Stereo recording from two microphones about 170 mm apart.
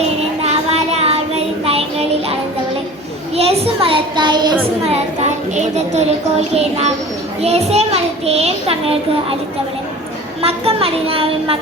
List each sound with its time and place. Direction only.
0.2 s music: 40° right (ahead or behind)
1.6 s child singing: 35° right (ahead or behind)
3.3 s child singing: 35° right (ahead or behind)
5.5 s a child's voice: 40° right (ahead or behind)
10.4 s a child's voice: 35° right (ahead or behind)